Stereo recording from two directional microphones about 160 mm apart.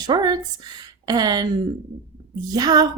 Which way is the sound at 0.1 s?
25° right (ahead or behind).